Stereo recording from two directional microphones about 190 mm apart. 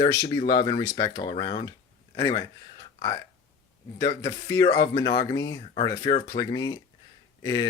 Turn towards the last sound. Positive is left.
turn(degrees=20)  # may be behind; listen again after turning